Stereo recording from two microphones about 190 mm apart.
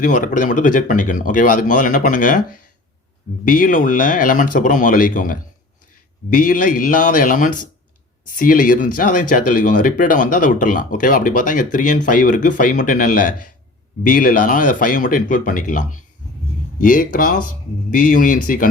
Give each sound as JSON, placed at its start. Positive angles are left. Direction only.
{"t": 0.0, "sound": "speech", "side_deg": 45}